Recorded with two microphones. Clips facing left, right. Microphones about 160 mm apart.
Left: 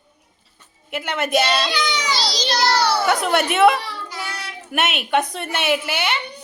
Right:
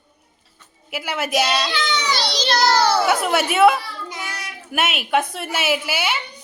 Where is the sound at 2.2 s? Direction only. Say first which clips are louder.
Right 2 dB; 55° right (ahead or behind).